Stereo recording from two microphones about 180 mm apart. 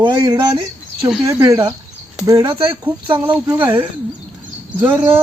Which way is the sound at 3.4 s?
10° right (ahead or behind).